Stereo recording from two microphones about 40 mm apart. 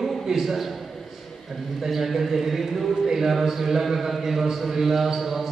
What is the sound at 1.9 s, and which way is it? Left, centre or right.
Speech, centre.